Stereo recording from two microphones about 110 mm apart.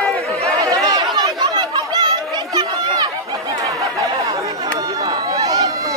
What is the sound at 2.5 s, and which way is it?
Run, 35° right (ahead or behind).